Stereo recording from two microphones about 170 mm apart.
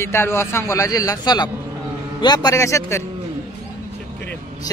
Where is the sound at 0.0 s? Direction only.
15° left (ahead or behind).